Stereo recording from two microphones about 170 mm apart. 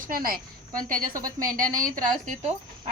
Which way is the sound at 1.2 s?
20° right (ahead or behind).